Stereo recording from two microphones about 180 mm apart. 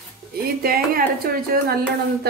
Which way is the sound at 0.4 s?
55° right (ahead or behind).